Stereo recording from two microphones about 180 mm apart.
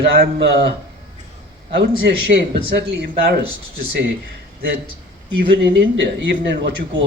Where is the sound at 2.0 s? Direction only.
65° right (ahead or behind).